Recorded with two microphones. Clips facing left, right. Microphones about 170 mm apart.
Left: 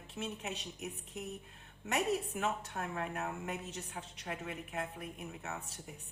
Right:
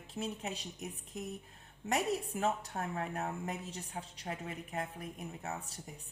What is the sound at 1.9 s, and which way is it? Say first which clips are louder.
A woman's voice: even; 35° right (ahead or behind).